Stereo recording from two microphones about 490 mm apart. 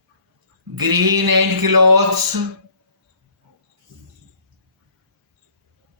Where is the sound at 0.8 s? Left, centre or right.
Right.